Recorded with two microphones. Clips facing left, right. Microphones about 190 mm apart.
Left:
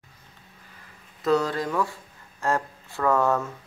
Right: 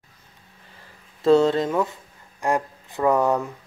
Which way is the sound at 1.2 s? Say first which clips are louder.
Right 7 dB; 25° right (ahead or behind).